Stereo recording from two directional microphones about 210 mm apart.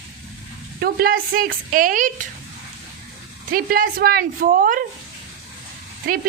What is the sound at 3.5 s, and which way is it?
A woman's voice, 40° right (ahead or behind).